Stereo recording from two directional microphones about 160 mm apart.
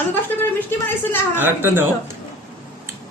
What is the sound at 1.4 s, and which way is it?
Speech, 10° right (ahead or behind).